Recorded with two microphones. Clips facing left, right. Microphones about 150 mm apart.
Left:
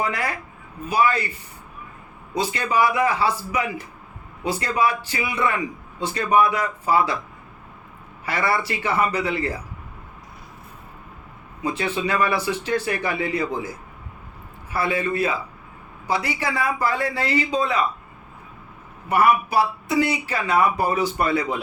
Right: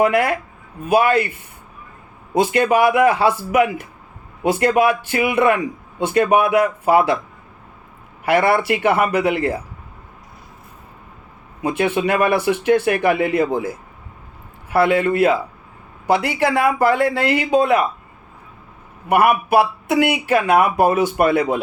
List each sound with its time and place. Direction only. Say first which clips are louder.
0.0 s a man's voice: right 10 dB; 60° right (ahead or behind)
2.3 s a man's voice: right 7 dB; 55° right (ahead or behind)
8.2 s a man's voice: right 8 dB; 60° right (ahead or behind)
11.6 s a man's voice: right 6 dB; 55° right (ahead or behind)
14.7 s a man's voice: right 8 dB; 65° right (ahead or behind)
19.0 s a man's voice: right 3 dB; 55° right (ahead or behind)